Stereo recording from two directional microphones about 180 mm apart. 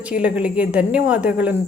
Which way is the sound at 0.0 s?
5° right (ahead or behind).